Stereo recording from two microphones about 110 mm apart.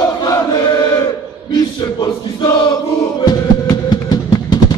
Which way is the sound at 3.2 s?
40° left (ahead or behind).